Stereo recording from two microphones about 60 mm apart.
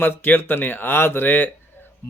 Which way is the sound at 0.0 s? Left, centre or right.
Left.